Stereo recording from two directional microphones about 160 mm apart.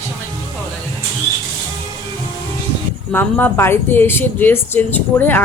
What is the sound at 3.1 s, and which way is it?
Speech, 15° left (ahead or behind).